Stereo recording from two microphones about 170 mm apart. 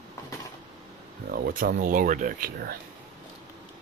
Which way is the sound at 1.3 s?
60° right (ahead or behind).